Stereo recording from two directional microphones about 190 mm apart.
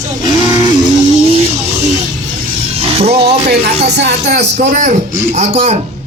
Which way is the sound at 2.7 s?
30° right (ahead or behind).